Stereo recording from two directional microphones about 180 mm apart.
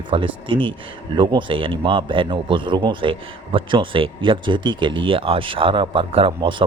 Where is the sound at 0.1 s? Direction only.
30° right (ahead or behind).